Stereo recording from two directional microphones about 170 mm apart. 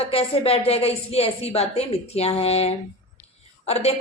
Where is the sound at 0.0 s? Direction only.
35° left (ahead or behind).